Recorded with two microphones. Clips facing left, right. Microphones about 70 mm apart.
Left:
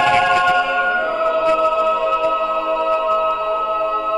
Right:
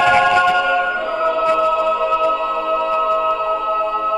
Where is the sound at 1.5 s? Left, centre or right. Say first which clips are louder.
Even; centre.